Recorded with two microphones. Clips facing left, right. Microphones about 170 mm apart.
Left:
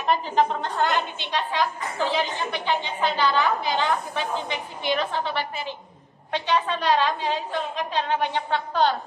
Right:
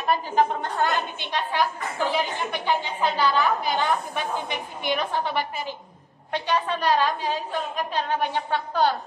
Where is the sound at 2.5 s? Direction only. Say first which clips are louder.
Right 1 dB; 10° right (ahead or behind).